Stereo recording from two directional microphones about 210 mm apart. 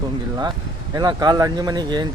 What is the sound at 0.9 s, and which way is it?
Speech, 20° right (ahead or behind).